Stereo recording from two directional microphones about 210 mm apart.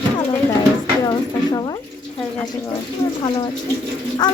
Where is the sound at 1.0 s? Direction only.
20° left (ahead or behind).